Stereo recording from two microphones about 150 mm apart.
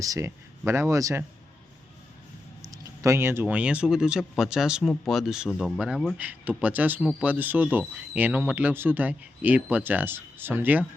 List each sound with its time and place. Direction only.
0.0 s speech: 20° right (ahead or behind)
2.7 s speech: 20° right (ahead or behind)